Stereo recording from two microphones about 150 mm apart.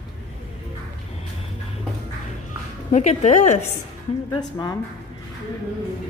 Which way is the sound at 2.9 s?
50° left (ahead or behind).